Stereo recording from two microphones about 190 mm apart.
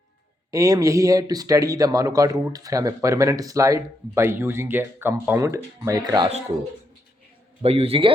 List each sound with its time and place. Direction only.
0.5 s speech: 20° right (ahead or behind)
7.6 s a man's voice: 30° right (ahead or behind)